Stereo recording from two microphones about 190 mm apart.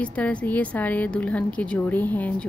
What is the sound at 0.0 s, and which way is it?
A woman's voice, 5° left (ahead or behind).